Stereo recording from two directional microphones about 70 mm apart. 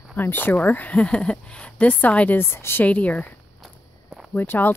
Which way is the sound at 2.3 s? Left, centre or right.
Left.